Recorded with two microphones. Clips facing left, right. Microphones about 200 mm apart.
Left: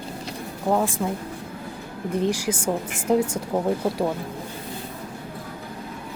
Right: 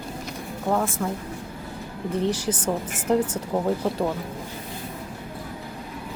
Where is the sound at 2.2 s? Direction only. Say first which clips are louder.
Left 1 dB; 10° left (ahead or behind).